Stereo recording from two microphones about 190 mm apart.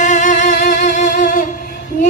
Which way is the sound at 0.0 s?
40° left (ahead or behind).